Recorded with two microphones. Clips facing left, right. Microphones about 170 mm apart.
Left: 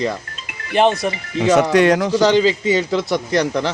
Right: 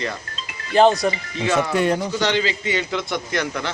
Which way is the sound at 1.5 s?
90° left.